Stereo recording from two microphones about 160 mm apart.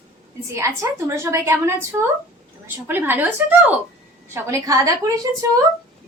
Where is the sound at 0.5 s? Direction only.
20° right (ahead or behind).